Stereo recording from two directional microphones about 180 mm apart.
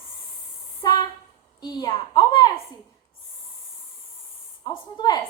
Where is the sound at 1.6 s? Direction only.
25° left (ahead or behind).